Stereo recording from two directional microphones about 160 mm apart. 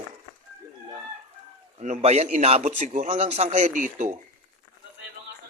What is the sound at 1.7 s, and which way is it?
Speech, 45° right (ahead or behind).